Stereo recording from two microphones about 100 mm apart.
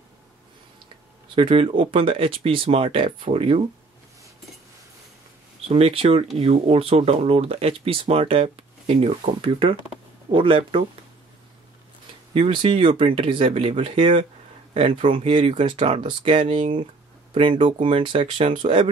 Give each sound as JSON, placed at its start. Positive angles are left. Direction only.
{"t": 1.3, "sound": "speech", "side_deg": -60}
{"t": 5.7, "sound": "speech", "side_deg": -75}
{"t": 12.4, "sound": "speech", "side_deg": -65}
{"t": 17.3, "sound": "speech", "side_deg": -60}